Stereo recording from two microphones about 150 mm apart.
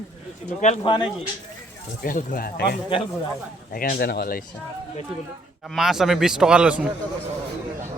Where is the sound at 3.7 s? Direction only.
80° left.